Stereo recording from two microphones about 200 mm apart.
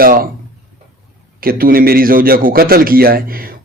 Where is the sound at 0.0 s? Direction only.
45° right (ahead or behind).